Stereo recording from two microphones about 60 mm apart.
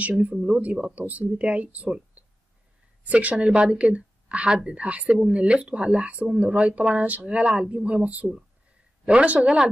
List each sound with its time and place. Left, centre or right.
0.2 s speech: right
3.0 s speech: right